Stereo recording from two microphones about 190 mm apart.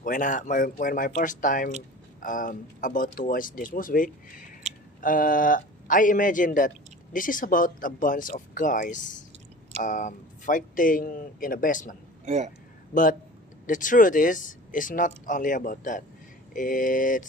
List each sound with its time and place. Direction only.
0.0 s speech: 45° left (ahead or behind)
12.2 s speech: 35° right (ahead or behind)
12.9 s speech: 45° left (ahead or behind)